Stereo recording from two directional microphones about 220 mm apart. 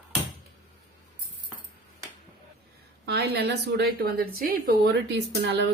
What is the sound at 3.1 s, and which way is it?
A woman's voice, 50° right (ahead or behind).